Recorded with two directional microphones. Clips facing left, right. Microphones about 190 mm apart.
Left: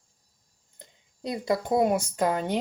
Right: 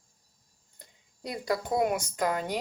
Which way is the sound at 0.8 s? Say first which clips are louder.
Left 4 dB; 20° left (ahead or behind).